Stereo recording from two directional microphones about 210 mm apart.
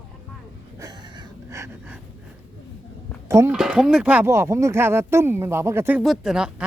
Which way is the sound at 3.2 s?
15° right (ahead or behind).